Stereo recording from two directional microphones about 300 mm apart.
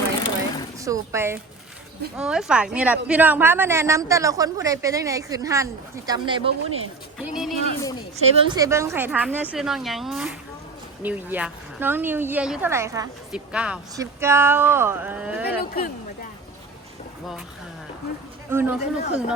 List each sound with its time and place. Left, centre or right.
0.8 s a woman's voice: centre
7.2 s speech: centre
8.1 s a woman's voice: centre
15.4 s speech: left
18.5 s a woman's voice: centre